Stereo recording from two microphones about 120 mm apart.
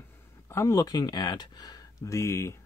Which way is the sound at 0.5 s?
25° left (ahead or behind).